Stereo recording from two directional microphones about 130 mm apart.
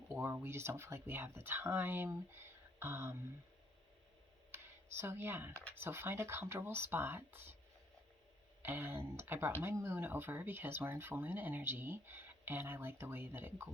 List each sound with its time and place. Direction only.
0.1 s speech: 10° right (ahead or behind)
4.5 s speech: 20° right (ahead or behind)
8.6 s speech: 15° right (ahead or behind)